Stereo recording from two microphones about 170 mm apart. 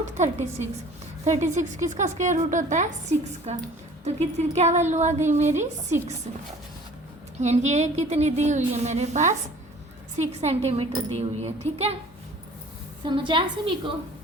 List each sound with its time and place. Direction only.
0.0 s a woman's voice: 45° right (ahead or behind)
7.4 s a woman's voice: 40° right (ahead or behind)
13.1 s a woman's voice: 30° right (ahead or behind)